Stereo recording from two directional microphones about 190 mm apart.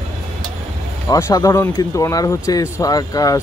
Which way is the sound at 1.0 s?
15° left (ahead or behind).